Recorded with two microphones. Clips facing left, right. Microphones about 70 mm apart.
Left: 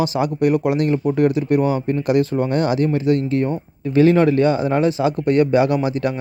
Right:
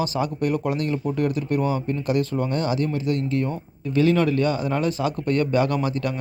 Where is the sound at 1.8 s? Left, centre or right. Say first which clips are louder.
Left 6 dB; left.